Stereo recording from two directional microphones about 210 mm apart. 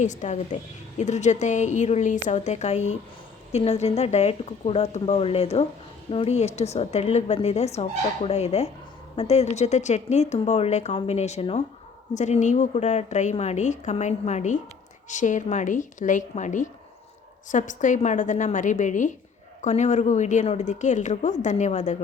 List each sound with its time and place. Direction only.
0.0 s a woman's voice: 35° left (ahead or behind)